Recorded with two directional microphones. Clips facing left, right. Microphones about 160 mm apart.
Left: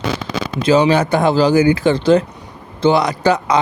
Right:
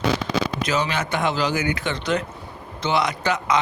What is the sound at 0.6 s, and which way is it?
Speech, 30° left (ahead or behind).